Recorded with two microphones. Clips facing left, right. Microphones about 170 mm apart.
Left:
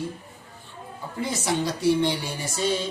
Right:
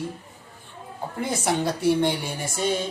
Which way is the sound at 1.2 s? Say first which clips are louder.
Right 1 dB; 55° right (ahead or behind).